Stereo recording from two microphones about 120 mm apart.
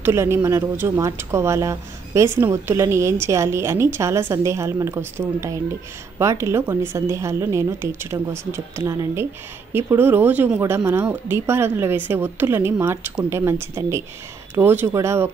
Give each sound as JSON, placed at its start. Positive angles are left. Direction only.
{"t": 0.0, "sound": "speech", "side_deg": -25}